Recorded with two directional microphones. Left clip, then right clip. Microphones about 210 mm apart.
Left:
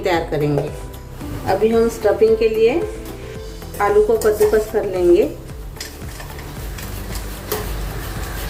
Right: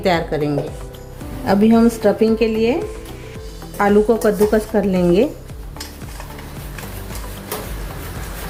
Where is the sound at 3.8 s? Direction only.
40° right (ahead or behind).